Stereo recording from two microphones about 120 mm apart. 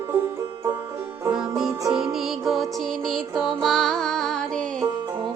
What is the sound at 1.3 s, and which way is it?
Music, 5° right (ahead or behind).